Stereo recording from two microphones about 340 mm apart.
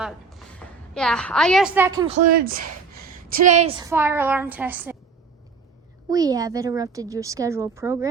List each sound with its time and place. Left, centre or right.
0.0 s a sound: centre
0.9 s a woman's voice: centre
6.1 s speech: centre